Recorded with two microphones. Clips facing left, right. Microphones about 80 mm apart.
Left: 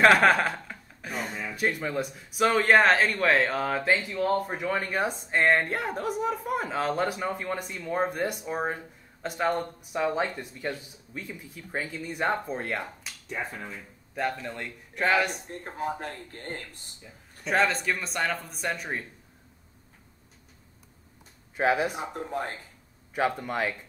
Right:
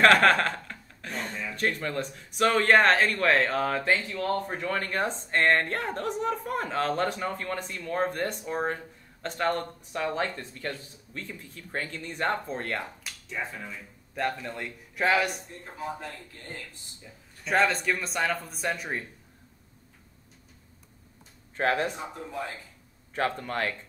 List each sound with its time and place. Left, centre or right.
0.0 s a sound: centre
1.5 s speech: centre
13.3 s speech: left
14.1 s speech: centre
15.4 s speech: left
17.0 s speech: centre
21.5 s speech: centre
22.1 s speech: left
23.1 s speech: centre